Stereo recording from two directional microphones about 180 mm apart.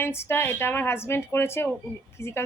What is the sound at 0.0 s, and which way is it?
A woman's voice, 15° left (ahead or behind).